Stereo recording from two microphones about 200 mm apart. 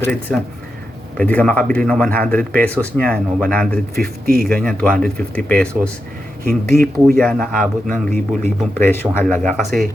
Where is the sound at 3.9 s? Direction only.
50° right (ahead or behind).